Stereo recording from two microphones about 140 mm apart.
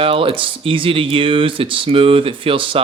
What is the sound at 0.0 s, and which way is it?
A man's voice, 40° right (ahead or behind).